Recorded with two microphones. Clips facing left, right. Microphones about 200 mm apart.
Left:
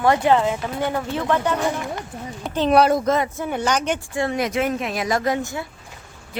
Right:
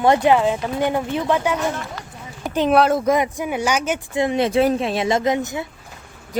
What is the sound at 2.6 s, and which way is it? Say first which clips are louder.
Speech: even; centre (ahead or behind).